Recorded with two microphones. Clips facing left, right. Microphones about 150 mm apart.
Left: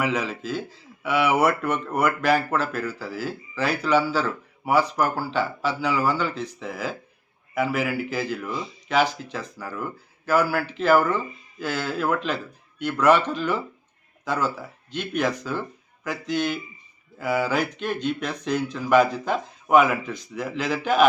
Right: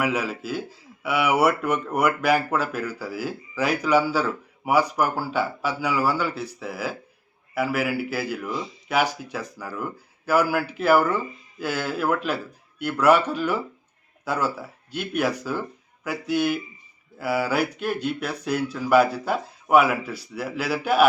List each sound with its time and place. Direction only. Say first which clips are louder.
0.0 s speech: even; 10° right (ahead or behind)